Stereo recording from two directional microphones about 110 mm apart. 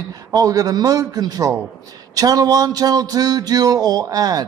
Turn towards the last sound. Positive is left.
turn(degrees=-35)  # may be behind; listen again after turning